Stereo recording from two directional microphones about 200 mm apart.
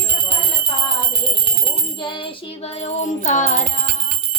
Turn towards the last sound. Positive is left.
turn(degrees=40)  # may be behind; listen again after turning